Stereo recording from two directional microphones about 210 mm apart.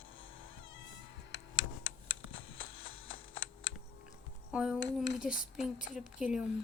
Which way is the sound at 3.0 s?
70° left (ahead or behind).